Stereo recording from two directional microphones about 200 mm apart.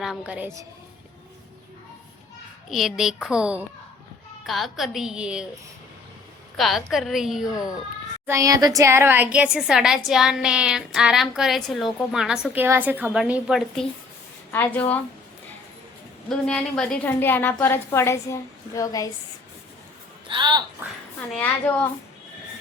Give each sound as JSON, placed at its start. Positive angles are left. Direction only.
{"t": 0.0, "sound": "a woman's voice", "side_deg": -5}
{"t": 2.6, "sound": "a woman's voice", "side_deg": 0}
{"t": 6.6, "sound": "a woman's voice", "side_deg": 0}
{"t": 8.3, "sound": "a woman's voice", "side_deg": -15}
{"t": 14.5, "sound": "a woman's voice", "side_deg": 10}
{"t": 16.3, "sound": "a woman's voice", "side_deg": 5}
{"t": 20.2, "sound": "speech", "side_deg": -25}
{"t": 21.2, "sound": "a woman's voice", "side_deg": 10}